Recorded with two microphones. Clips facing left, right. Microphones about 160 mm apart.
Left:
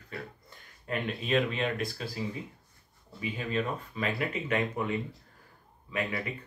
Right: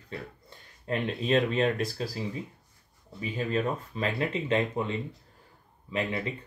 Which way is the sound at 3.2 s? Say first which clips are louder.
Right 3 dB; 35° right (ahead or behind).